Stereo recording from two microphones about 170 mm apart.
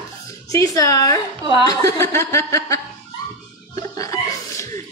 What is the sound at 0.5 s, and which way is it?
A woman's voice, 20° left (ahead or behind).